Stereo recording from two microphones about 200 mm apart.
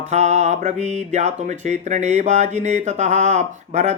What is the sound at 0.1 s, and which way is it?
Music, 35° right (ahead or behind).